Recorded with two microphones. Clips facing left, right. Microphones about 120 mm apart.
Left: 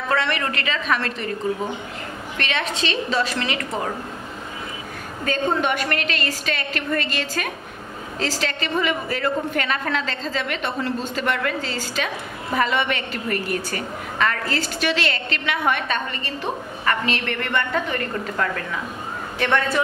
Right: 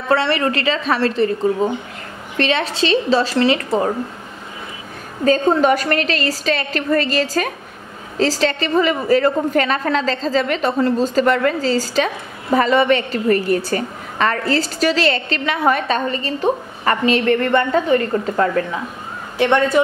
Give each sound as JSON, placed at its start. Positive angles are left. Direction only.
{"t": 0.1, "sound": "a woman's voice", "side_deg": -30}
{"t": 5.2, "sound": "a woman's voice", "side_deg": -35}